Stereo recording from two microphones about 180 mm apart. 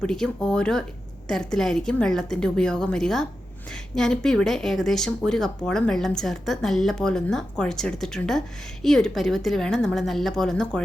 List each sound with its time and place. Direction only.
0.0 s speech: 5° left (ahead or behind)